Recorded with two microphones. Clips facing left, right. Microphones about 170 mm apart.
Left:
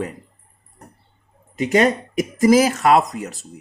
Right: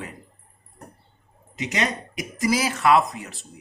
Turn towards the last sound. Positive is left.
turn(degrees=40)  # may be behind; listen again after turning